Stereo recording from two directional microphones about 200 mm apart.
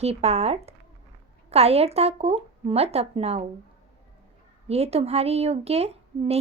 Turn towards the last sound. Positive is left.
turn(degrees=-30)  # may be behind; listen again after turning